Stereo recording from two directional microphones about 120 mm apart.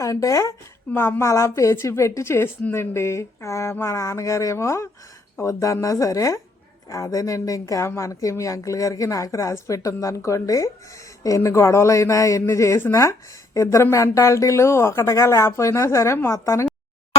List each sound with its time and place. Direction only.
0.0 s speech: 25° left (ahead or behind)
0.9 s speech: 15° left (ahead or behind)